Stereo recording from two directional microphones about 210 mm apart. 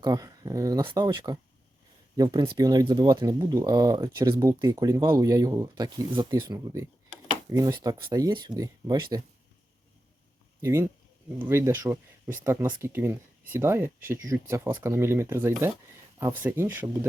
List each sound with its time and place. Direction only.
0.0 s speech: 15° right (ahead or behind)
10.6 s speech: 15° right (ahead or behind)